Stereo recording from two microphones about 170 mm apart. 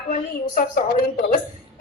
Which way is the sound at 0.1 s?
50° left (ahead or behind).